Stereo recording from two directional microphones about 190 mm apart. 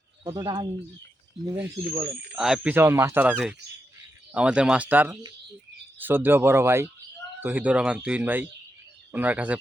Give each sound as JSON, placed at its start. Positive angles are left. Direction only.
{"t": 0.3, "sound": "speech", "side_deg": -25}
{"t": 1.5, "sound": "speech", "side_deg": -10}